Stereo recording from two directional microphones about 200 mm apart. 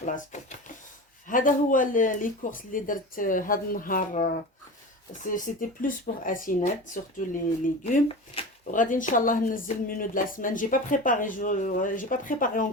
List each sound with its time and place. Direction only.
0.0 s a woman's voice: 40° left (ahead or behind)